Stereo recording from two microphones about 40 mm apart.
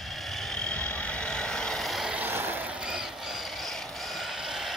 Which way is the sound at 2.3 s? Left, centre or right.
Right.